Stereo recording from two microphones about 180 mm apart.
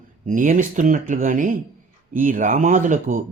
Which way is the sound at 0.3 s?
45° right (ahead or behind).